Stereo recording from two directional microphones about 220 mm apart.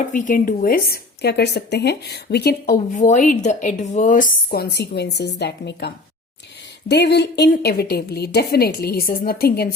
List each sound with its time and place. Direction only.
0.1 s a woman's voice: 35° left (ahead or behind)
2.9 s a woman's voice: 35° left (ahead or behind)